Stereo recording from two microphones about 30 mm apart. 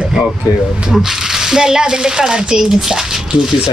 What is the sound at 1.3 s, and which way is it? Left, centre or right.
Speech, centre.